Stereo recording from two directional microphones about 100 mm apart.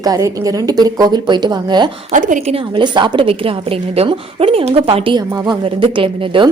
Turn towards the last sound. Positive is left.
turn(degrees=-60)  # may be behind; listen again after turning